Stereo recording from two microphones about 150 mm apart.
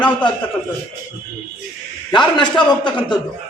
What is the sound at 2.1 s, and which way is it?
A man's voice, 30° left (ahead or behind).